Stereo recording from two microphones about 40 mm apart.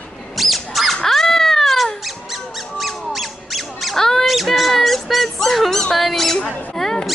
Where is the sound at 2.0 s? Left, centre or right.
Centre.